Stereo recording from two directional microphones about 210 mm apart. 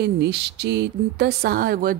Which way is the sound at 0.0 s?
50° right (ahead or behind).